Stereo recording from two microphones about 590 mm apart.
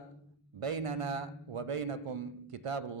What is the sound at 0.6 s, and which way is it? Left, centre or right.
A man's voice, right.